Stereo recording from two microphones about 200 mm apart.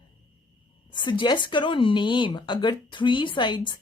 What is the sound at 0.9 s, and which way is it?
Speech, 25° left (ahead or behind).